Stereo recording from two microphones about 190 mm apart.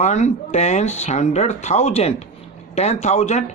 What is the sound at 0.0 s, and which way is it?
Speech, 40° left (ahead or behind).